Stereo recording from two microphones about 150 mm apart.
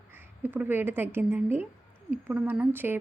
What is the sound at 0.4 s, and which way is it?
A woman's voice, 10° right (ahead or behind).